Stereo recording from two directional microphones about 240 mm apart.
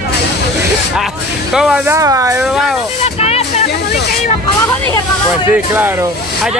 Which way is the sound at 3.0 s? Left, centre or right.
Left.